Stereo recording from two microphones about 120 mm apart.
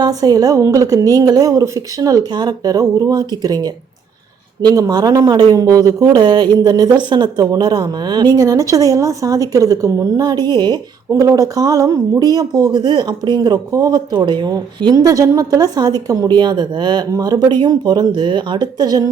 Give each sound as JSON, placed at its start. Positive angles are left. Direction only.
{"t": 0.0, "sound": "speech", "side_deg": -30}
{"t": 11.1, "sound": "speech", "side_deg": -25}